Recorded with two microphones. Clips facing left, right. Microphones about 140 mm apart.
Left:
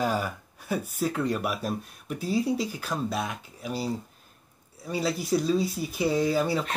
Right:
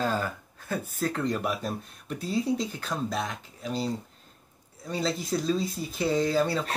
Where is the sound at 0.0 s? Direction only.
15° left (ahead or behind).